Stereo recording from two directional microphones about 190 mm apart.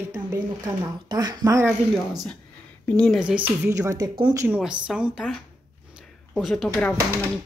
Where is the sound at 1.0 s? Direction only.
20° right (ahead or behind).